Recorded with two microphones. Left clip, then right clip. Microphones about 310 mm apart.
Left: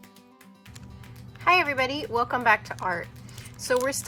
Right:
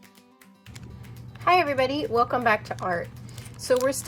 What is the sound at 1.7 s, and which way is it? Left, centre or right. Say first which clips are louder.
Speech: right 3 dB; centre.